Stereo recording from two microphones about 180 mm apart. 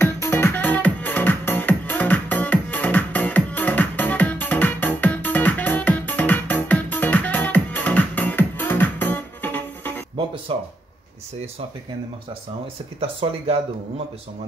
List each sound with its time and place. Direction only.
0.0 s music: 15° left (ahead or behind)
10.5 s speech: 30° right (ahead or behind)
13.0 s speech: 30° right (ahead or behind)